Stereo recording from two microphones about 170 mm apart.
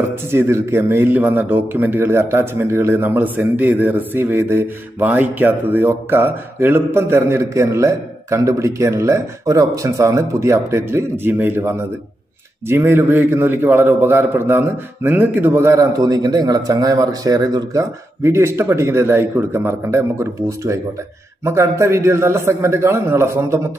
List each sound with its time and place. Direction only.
0.3 s a man's voice: 15° right (ahead or behind)